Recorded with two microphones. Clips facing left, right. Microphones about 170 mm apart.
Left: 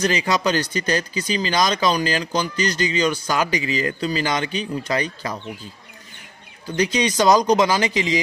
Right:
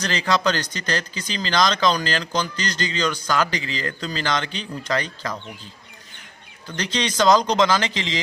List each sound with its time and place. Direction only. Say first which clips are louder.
0.0 s speech: left 2 dB; 10° left (ahead or behind)
6.7 s speech: left 5 dB; 10° left (ahead or behind)